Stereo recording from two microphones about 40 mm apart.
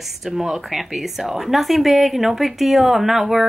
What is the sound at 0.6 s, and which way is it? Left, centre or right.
A woman's voice, centre.